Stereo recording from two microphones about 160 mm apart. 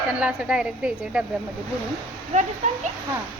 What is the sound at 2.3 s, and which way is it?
Speech, 45° right (ahead or behind).